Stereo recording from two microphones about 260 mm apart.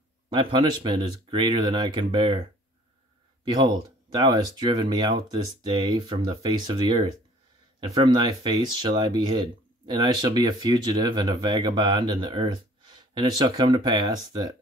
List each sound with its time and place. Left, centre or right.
0.3 s speech: centre
3.4 s speech: centre